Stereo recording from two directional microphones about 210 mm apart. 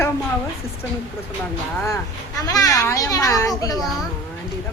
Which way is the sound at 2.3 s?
15° left (ahead or behind).